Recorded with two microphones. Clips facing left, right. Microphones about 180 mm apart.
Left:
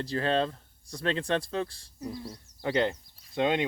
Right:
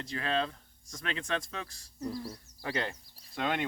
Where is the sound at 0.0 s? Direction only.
35° left (ahead or behind).